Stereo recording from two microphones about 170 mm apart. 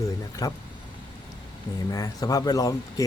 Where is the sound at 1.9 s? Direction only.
20° left (ahead or behind).